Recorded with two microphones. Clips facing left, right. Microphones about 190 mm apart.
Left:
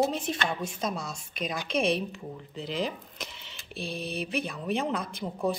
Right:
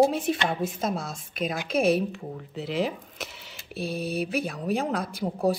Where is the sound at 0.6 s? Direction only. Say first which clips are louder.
Right 3 dB; 55° right (ahead or behind).